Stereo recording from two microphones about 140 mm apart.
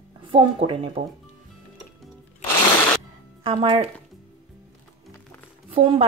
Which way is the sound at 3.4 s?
40° right (ahead or behind).